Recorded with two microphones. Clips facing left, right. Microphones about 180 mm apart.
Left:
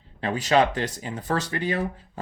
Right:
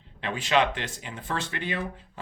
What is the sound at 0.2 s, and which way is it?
Speech, 40° left (ahead or behind).